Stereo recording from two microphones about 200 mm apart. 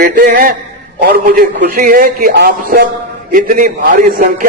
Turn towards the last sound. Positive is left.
turn(degrees=-45)  # may be behind; listen again after turning